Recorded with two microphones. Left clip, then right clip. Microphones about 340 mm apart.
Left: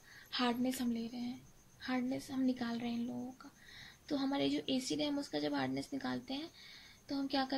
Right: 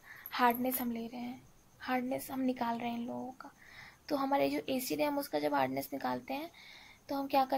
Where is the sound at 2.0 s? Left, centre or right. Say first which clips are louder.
Right 3 dB; right.